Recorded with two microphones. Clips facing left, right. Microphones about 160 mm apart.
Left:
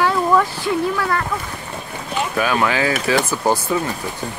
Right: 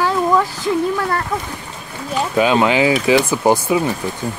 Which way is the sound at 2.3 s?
20° right (ahead or behind).